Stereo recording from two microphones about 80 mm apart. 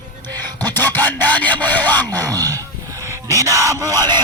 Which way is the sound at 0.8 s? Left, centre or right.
Left.